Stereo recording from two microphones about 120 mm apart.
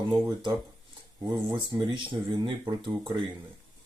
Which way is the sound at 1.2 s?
35° right (ahead or behind).